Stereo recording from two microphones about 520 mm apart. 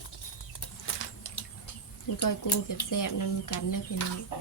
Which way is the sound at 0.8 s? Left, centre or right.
Left.